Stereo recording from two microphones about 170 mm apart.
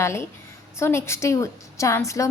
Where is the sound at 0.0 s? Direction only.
15° left (ahead or behind).